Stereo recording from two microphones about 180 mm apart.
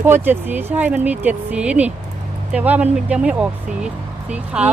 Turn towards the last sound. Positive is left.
turn(degrees=-5)  # may be behind; listen again after turning